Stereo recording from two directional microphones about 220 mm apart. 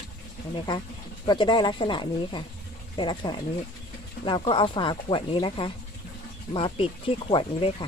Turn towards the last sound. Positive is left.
turn(degrees=25)  # may be behind; listen again after turning